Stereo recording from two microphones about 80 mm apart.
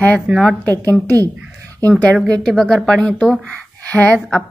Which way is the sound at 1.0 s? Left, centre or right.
Right.